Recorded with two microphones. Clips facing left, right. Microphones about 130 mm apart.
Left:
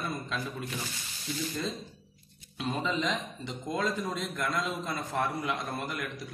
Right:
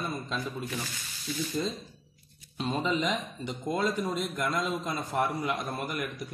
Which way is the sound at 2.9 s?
10° right (ahead or behind).